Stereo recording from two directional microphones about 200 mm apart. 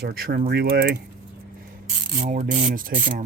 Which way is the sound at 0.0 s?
50° right (ahead or behind).